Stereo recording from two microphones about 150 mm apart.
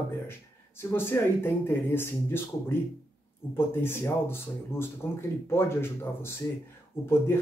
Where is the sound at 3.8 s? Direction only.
15° left (ahead or behind).